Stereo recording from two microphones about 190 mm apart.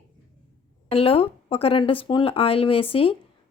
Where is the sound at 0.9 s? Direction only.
30° left (ahead or behind).